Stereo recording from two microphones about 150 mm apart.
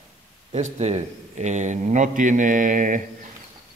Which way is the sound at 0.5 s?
50° right (ahead or behind).